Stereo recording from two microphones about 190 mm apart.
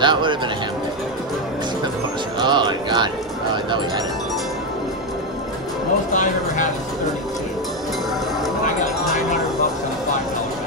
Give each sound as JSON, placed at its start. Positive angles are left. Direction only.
{"t": 0.0, "sound": "speech", "side_deg": -25}
{"t": 2.3, "sound": "music", "side_deg": -25}
{"t": 6.1, "sound": "speech", "side_deg": 40}